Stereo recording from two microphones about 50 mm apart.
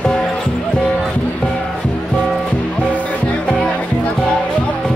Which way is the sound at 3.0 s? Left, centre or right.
Left.